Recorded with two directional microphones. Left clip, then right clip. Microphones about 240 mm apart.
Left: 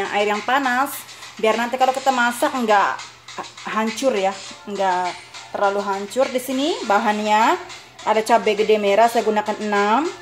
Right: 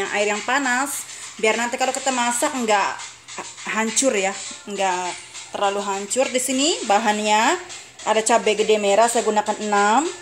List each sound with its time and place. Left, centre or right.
0.0 s speech: centre